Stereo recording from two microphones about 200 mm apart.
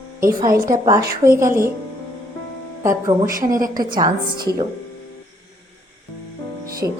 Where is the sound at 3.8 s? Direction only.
20° right (ahead or behind).